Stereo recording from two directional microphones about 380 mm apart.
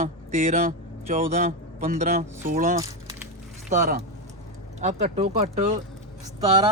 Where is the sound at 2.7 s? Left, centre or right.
Centre.